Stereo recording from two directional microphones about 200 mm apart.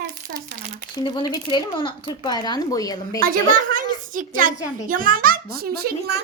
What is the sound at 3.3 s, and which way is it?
A woman's voice, 40° right (ahead or behind).